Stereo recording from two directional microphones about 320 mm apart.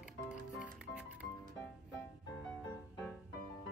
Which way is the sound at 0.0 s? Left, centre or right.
Centre.